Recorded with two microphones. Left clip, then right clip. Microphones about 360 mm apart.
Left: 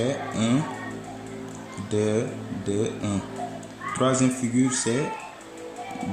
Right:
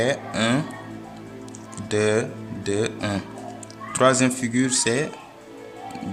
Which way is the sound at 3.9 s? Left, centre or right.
Right.